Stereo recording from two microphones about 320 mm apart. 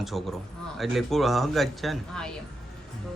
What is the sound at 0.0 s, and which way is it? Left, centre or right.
A woman's voice, centre.